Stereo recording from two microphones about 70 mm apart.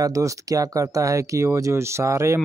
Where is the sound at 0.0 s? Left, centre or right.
Right.